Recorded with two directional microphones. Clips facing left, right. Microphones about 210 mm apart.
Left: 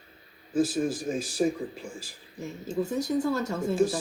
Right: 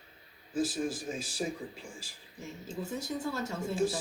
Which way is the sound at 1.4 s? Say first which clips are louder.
Left 10 dB; 55° left (ahead or behind).